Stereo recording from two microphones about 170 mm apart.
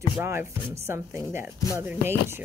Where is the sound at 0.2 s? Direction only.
15° right (ahead or behind).